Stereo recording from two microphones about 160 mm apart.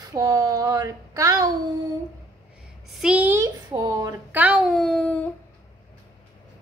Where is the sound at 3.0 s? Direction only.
10° right (ahead or behind).